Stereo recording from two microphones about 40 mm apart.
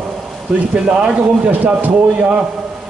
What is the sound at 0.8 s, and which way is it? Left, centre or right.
Speech, right.